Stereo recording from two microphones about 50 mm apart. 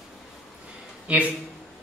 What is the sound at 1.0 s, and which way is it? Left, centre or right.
Speech, right.